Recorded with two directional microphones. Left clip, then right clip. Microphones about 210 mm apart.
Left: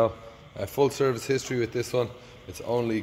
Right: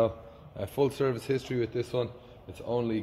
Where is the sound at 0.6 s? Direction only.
10° left (ahead or behind).